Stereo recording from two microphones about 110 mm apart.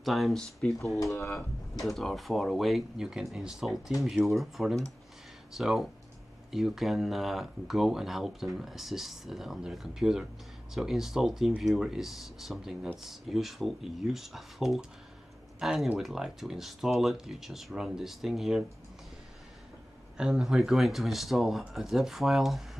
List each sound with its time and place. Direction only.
0.0 s speech: centre (ahead or behind)
0.9 s speech: 30° left (ahead or behind)
1.3 s speech: centre (ahead or behind)
20.2 s speech: 5° right (ahead or behind)